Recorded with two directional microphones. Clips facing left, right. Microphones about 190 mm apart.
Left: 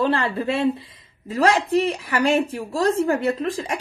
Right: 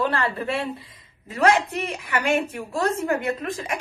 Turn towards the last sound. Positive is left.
turn(degrees=30)  # may be behind; listen again after turning